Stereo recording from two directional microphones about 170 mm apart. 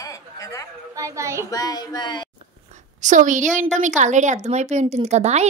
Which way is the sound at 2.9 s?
45° right (ahead or behind).